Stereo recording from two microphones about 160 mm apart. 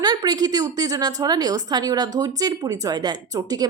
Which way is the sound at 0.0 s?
25° right (ahead or behind).